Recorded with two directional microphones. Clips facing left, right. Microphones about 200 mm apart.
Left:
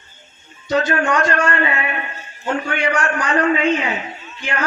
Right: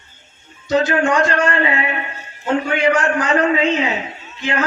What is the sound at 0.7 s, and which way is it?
A man's voice, 25° right (ahead or behind).